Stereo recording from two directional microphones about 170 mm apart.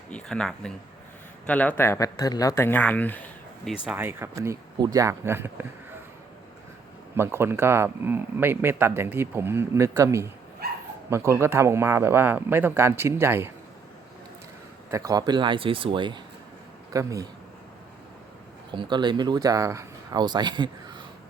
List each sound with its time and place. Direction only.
0.1 s speech: 5° left (ahead or behind)
3.8 s speech: 10° right (ahead or behind)
7.2 s speech: 15° right (ahead or behind)
10.6 s bow-wow: 65° right (ahead or behind)
11.1 s speech: 15° right (ahead or behind)
14.8 s speech: 20° right (ahead or behind)
18.7 s speech: 25° right (ahead or behind)